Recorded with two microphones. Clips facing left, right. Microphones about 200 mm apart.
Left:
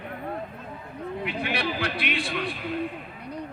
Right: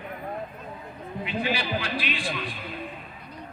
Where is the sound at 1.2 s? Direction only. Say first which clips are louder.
Right 1 dB; 65° left (ahead or behind).